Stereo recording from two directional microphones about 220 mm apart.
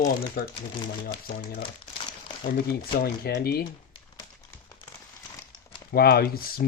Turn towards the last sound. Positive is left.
turn(degrees=45)  # may be behind; listen again after turning